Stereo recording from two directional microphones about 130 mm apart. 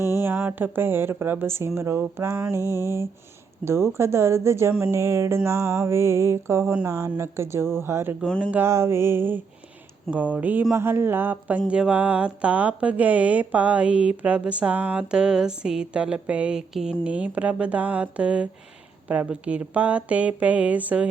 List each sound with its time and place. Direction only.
0.2 s speech: 15° right (ahead or behind)
2.6 s mantra: 25° left (ahead or behind)
3.6 s music: 20° right (ahead or behind)
8.2 s speech: 5° left (ahead or behind)
8.4 s music: 15° right (ahead or behind)
10.1 s speech: 10° right (ahead or behind)